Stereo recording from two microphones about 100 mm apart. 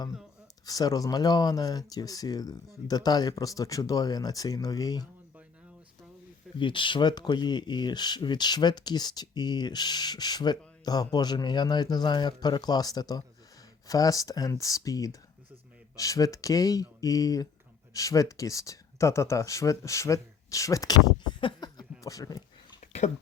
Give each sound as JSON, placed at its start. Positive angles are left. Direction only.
{"t": 0.6, "sound": "speech", "side_deg": 40}
{"t": 6.6, "sound": "speech", "side_deg": 55}
{"t": 21.4, "sound": "a sound", "side_deg": 45}